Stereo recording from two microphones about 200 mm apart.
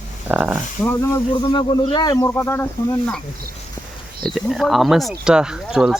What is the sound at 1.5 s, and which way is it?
Speech, 25° left (ahead or behind).